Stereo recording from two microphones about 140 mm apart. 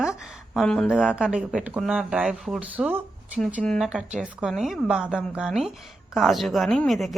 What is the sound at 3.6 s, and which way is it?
A woman's voice, centre (ahead or behind).